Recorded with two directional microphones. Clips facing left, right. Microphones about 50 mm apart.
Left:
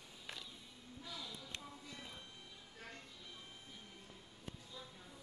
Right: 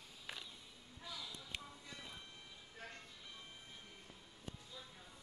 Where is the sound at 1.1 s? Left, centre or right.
Centre.